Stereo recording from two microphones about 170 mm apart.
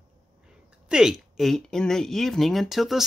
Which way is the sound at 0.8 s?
5° right (ahead or behind).